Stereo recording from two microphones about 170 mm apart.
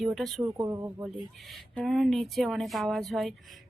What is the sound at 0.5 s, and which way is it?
Speech, 20° right (ahead or behind).